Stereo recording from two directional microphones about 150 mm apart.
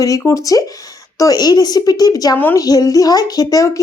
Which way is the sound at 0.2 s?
20° left (ahead or behind).